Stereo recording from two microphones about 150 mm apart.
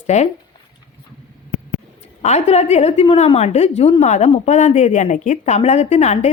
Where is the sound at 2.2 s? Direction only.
45° left (ahead or behind).